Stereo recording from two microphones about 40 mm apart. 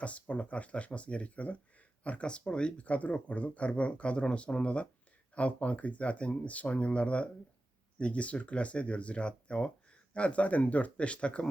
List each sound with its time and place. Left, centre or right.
0.0 s speech: left